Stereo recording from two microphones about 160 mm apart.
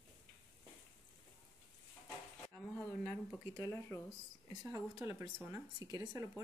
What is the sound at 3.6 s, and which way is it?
Speech, 15° left (ahead or behind).